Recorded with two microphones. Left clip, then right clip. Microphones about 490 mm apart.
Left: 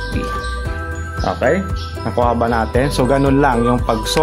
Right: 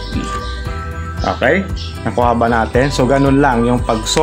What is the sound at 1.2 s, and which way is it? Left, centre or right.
Speech, left.